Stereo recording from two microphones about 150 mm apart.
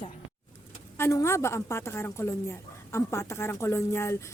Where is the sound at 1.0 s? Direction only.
20° left (ahead or behind).